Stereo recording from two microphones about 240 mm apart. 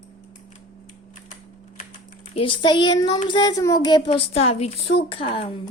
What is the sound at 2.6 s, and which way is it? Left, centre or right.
Speech, centre.